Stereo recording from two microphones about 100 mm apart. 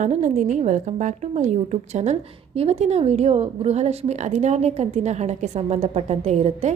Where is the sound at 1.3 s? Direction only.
90° right.